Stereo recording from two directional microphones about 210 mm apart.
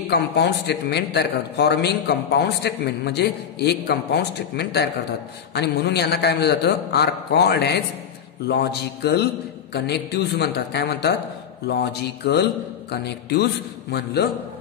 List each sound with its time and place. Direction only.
0.1 s a man's voice: 50° left (ahead or behind)